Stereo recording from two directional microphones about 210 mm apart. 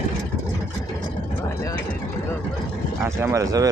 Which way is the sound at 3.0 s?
15° right (ahead or behind).